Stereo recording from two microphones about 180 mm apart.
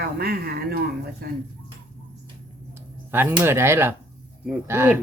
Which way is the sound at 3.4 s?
15° right (ahead or behind).